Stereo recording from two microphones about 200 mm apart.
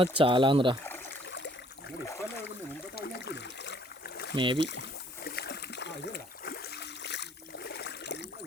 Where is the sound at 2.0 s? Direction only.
15° left (ahead or behind).